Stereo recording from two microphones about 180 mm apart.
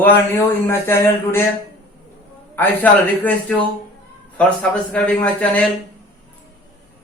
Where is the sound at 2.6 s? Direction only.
10° left (ahead or behind).